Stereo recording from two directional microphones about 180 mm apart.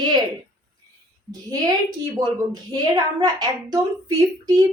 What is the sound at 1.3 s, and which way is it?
A woman's voice, 20° right (ahead or behind).